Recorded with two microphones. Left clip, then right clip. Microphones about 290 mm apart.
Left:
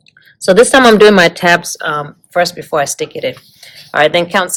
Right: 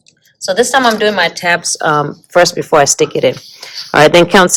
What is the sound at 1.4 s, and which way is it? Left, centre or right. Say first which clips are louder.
Speech: left 2 dB; centre.